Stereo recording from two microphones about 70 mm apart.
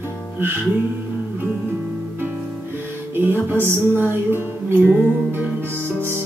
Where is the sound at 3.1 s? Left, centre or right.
Right.